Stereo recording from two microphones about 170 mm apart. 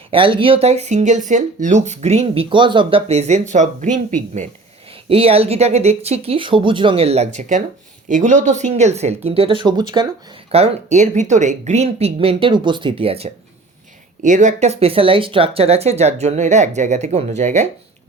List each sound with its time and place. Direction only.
0.1 s speech: 30° right (ahead or behind); by 4.4 s 45° right (ahead or behind)
5.0 s speech: 35° right (ahead or behind)
10.5 s speech: 40° right (ahead or behind)
14.2 s speech: 45° right (ahead or behind)